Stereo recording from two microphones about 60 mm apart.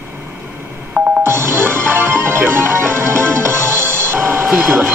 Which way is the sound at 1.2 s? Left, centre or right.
Right.